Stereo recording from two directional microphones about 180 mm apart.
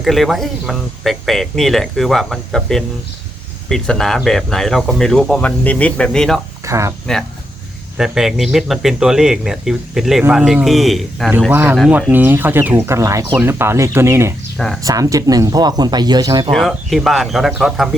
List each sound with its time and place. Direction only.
0.0 s speech: centre (ahead or behind)
6.7 s speech: 15° right (ahead or behind)
7.9 s speech: 5° right (ahead or behind); by 16.5 s 25° right (ahead or behind)
16.5 s speech: centre (ahead or behind)